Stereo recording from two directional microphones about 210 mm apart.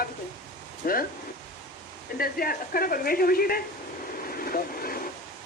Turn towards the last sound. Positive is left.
turn(degrees=45)  # may be behind; listen again after turning